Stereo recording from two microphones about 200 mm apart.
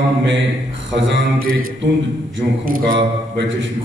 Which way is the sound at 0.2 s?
65° right (ahead or behind).